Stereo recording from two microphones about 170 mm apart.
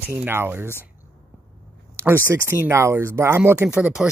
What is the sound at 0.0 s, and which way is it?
Speech, 10° right (ahead or behind).